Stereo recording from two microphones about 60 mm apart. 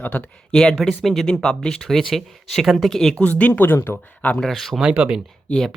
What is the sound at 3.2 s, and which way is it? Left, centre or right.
Speech, left.